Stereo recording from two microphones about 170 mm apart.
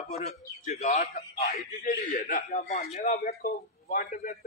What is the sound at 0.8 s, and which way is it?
A man's voice, 50° left (ahead or behind).